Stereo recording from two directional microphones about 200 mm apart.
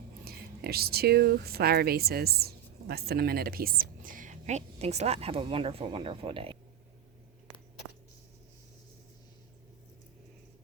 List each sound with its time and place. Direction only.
0.3 s speech: 50° right (ahead or behind); by 6.6 s 25° right (ahead or behind)